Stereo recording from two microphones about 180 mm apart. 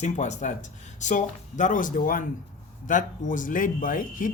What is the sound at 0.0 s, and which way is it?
Speech, 40° left (ahead or behind).